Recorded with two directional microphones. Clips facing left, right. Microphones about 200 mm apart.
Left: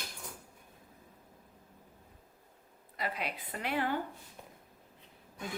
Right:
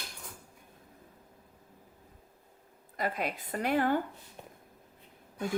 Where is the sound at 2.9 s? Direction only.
45° right (ahead or behind).